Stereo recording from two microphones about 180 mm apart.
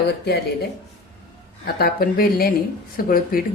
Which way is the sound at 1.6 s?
60° left (ahead or behind).